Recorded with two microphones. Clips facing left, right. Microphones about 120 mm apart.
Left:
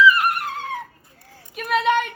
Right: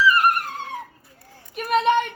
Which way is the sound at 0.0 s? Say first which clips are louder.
Left 3 dB; 40° right (ahead or behind).